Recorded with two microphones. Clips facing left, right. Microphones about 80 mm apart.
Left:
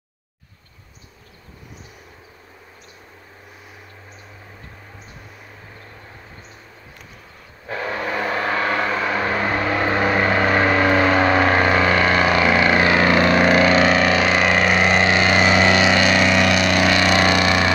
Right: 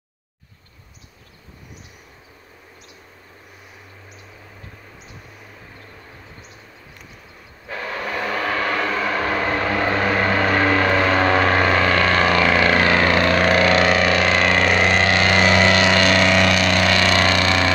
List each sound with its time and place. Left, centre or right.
7.7 s vehicle: left
8.8 s vehicle: centre